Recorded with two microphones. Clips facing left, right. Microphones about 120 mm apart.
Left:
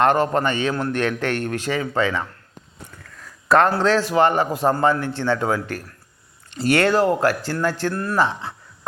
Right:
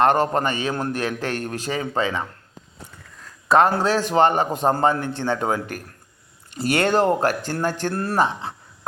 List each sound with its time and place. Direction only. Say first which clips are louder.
0.0 s a man's voice: even; 20° right (ahead or behind)
0.8 s speech: left 3 dB; 35° right (ahead or behind)
1.9 s a man's voice: left 1 dB; 20° right (ahead or behind)
3.8 s a man's voice: left 1 dB; 15° right (ahead or behind)
7.9 s a man's voice: even; 30° right (ahead or behind)